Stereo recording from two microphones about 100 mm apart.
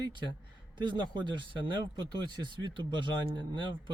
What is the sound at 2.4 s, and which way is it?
Speech, 50° right (ahead or behind).